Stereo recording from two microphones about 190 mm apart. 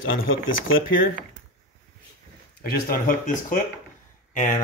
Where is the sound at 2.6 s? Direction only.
50° left (ahead or behind).